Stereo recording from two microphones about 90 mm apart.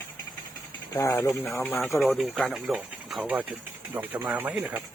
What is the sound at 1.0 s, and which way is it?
Speech, 35° left (ahead or behind).